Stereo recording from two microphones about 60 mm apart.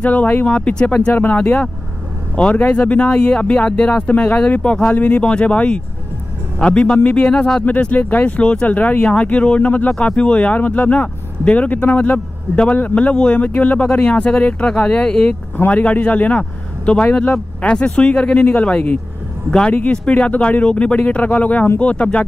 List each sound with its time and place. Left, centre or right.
0.0 s speech: left
5.2 s speech: centre
7.6 s speech: left